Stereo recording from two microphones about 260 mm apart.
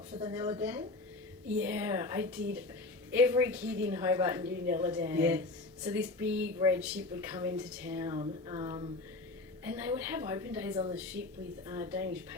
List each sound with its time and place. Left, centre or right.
0.1 s a woman's voice: centre
10.2 s a woman's voice: centre